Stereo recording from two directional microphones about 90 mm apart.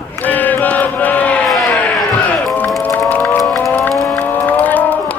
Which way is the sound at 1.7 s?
15° left (ahead or behind).